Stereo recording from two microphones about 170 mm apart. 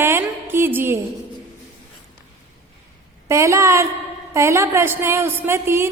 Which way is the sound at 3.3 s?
15° right (ahead or behind).